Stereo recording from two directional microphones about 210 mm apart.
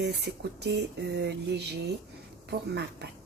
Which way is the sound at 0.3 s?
50° right (ahead or behind).